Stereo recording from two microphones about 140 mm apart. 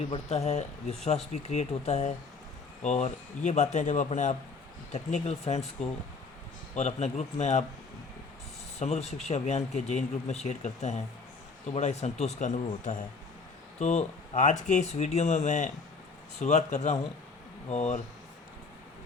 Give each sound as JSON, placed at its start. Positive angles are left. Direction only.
{"t": 0.1, "sound": "speech", "side_deg": 45}
{"t": 6.7, "sound": "speech", "side_deg": 50}
{"t": 8.8, "sound": "speech", "side_deg": 50}